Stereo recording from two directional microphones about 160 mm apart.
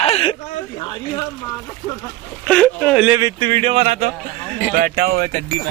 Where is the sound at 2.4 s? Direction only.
5° left (ahead or behind).